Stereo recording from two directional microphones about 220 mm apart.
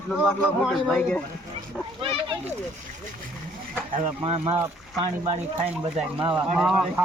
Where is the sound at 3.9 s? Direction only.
25° right (ahead or behind).